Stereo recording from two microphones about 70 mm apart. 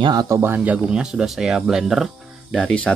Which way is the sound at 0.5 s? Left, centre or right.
Right.